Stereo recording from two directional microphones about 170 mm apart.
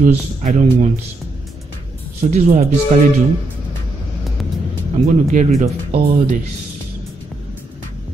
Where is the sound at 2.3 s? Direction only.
40° right (ahead or behind).